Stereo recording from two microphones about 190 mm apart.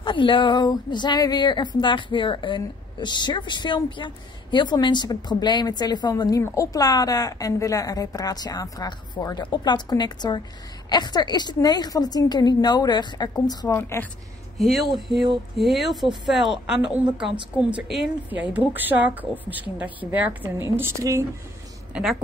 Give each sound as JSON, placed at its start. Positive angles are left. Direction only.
{"t": 0.0, "sound": "speech", "side_deg": 25}
{"t": 14.6, "sound": "a woman's voice", "side_deg": 0}